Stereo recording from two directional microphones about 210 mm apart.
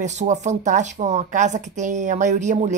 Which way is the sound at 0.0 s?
35° right (ahead or behind).